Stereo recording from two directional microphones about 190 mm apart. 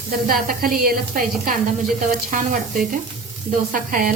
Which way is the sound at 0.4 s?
50° right (ahead or behind).